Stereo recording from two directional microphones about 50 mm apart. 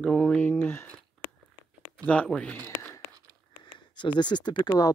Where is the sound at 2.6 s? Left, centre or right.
Left.